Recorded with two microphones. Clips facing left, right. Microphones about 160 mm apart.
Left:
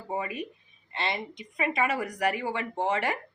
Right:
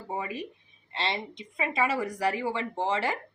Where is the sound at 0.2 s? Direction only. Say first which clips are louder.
Left 1 dB; 30° right (ahead or behind).